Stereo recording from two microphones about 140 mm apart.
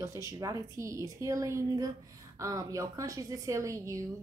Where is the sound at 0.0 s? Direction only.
20° right (ahead or behind).